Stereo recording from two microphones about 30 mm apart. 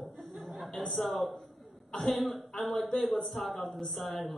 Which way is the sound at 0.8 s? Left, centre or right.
Centre.